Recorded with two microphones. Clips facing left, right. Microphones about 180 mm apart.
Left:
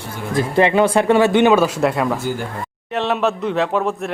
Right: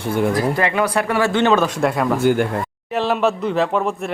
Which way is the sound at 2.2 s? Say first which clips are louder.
Right 8 dB; 65° right (ahead or behind).